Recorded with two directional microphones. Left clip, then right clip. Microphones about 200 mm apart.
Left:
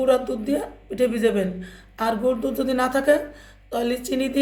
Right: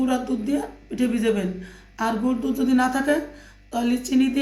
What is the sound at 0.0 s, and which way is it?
A woman's voice, 60° left (ahead or behind).